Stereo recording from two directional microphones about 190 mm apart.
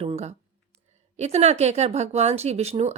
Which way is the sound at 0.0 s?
35° right (ahead or behind).